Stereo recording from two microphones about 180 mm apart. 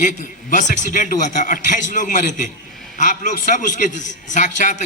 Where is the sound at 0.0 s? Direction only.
45° left (ahead or behind).